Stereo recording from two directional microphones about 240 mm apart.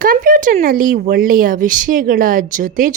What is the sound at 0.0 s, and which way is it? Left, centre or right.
A woman's voice, right.